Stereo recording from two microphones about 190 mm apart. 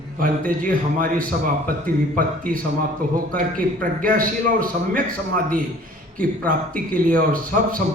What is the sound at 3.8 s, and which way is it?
A man's voice, 45° right (ahead or behind).